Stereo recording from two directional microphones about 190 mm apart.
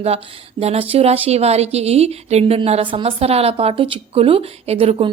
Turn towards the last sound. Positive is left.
turn(degrees=-30)  # may be behind; listen again after turning